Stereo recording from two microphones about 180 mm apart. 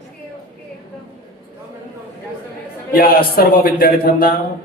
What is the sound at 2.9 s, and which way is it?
A man's voice, 55° left (ahead or behind).